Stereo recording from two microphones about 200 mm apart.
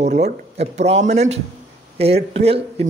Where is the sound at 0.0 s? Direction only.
35° right (ahead or behind).